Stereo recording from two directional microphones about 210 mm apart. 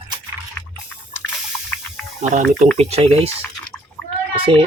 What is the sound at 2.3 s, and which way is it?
Speech, 35° right (ahead or behind).